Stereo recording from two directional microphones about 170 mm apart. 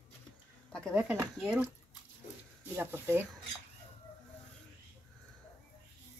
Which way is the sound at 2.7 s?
15° right (ahead or behind).